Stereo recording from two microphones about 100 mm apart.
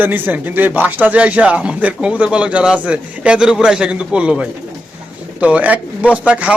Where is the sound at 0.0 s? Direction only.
20° right (ahead or behind).